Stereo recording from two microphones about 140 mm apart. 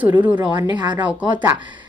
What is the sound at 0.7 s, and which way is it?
Speech, 30° right (ahead or behind).